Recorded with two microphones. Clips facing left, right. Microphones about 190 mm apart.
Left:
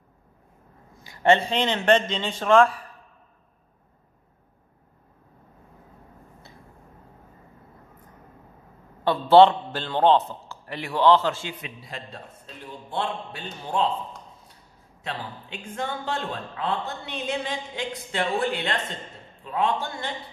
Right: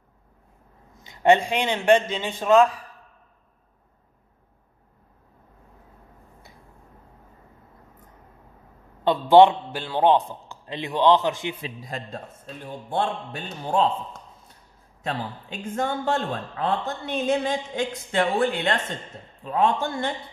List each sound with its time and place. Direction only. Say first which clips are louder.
0.9 s a man's voice: right 2 dB; 20° right (ahead or behind)
9.0 s a man's voice: right 1 dB; 15° right (ahead or behind)
11.6 s a woman's voice: right 4 dB; 45° right (ahead or behind)
15.7 s a woman's voice: right 5 dB; 45° right (ahead or behind)